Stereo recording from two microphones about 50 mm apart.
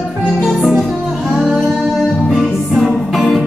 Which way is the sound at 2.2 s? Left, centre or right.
Centre.